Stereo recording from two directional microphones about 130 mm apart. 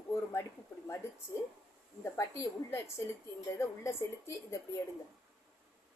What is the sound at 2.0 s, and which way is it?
A woman's voice, 20° left (ahead or behind).